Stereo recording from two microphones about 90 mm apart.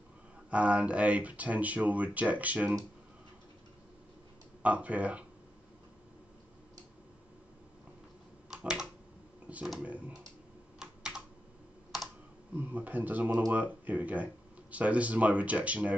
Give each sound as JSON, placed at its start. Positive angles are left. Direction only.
{"t": 0.5, "sound": "speech", "side_deg": -15}
{"t": 4.6, "sound": "speech", "side_deg": -15}
{"t": 8.5, "sound": "typing", "side_deg": -10}
{"t": 9.5, "sound": "speech", "side_deg": -15}
{"t": 10.8, "sound": "computer keyboard", "side_deg": -10}
{"t": 12.5, "sound": "speech", "side_deg": -20}